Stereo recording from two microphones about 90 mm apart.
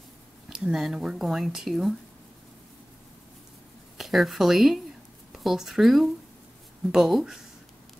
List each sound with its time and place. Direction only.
0.5 s speech: 5° right (ahead or behind)
4.0 s speech: centre (ahead or behind)